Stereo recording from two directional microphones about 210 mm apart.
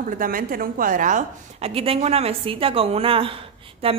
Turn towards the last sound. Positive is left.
turn(degrees=-25)  # may be behind; listen again after turning